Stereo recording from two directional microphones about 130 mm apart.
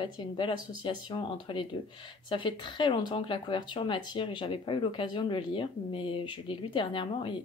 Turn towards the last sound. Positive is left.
turn(degrees=40)  # may be behind; listen again after turning